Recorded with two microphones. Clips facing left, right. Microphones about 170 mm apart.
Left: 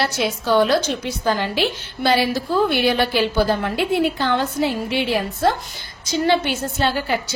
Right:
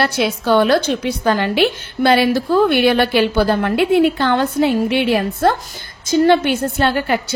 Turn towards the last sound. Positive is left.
turn(degrees=-60)  # may be behind; listen again after turning